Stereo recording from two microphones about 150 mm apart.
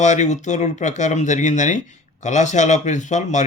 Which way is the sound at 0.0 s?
50° left (ahead or behind).